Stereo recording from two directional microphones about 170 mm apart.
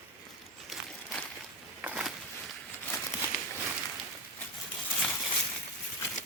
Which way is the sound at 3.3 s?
60° left (ahead or behind).